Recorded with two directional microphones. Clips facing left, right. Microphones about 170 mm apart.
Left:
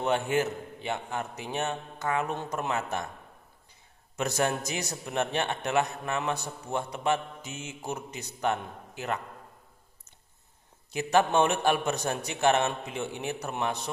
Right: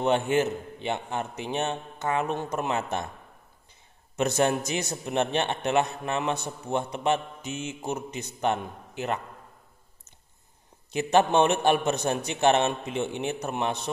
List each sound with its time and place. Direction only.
0.0 s a man's voice: 25° right (ahead or behind)
4.2 s a man's voice: 25° right (ahead or behind)
10.9 s a man's voice: 25° right (ahead or behind)